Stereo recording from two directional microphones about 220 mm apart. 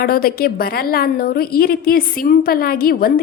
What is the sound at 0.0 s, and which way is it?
A woman's voice, 40° left (ahead or behind).